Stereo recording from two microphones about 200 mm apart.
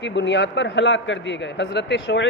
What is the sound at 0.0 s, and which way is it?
A man's voice, 65° left (ahead or behind).